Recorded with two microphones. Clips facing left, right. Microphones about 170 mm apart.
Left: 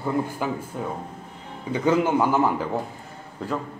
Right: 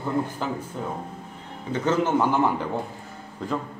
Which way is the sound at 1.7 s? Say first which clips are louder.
Left 2 dB; 10° left (ahead or behind).